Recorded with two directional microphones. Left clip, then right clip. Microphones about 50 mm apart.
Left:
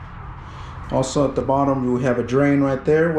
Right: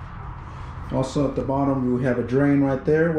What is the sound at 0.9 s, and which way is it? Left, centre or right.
Speech, right.